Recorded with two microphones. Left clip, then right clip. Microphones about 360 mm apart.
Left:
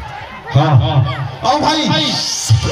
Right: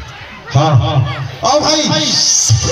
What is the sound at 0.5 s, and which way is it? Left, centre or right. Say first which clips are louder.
A man's voice: right 2 dB; centre.